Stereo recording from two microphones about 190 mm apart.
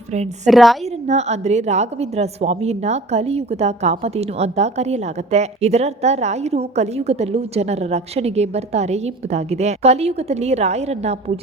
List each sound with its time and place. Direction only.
0.4 s a woman's voice: centre (ahead or behind)
0.9 s a woman's voice: 35° right (ahead or behind)